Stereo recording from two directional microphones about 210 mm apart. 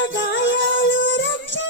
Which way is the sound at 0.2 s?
60° left (ahead or behind).